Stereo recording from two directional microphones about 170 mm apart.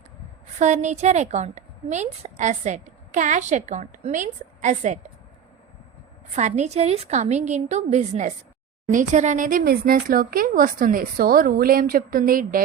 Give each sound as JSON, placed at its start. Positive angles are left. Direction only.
{"t": 0.6, "sound": "a woman's voice", "side_deg": -45}
{"t": 6.3, "sound": "a woman's voice", "side_deg": -45}